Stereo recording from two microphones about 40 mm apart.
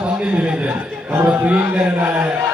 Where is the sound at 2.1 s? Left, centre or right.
Right.